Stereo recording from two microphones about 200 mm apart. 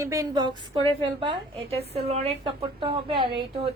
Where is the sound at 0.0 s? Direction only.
15° right (ahead or behind).